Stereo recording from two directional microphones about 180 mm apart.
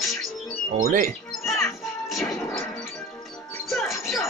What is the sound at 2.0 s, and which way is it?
Music, centre (ahead or behind).